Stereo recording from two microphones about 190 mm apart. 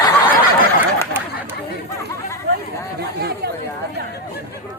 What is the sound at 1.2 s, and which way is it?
Chatter, 10° right (ahead or behind).